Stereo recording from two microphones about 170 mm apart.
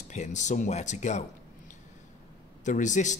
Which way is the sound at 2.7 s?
45° left (ahead or behind).